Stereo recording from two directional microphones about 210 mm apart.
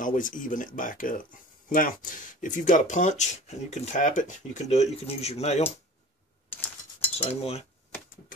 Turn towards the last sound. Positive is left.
turn(degrees=30)  # may be behind; listen again after turning